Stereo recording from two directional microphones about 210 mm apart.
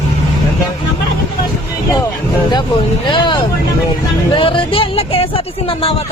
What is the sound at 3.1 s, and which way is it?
Speech, 20° left (ahead or behind).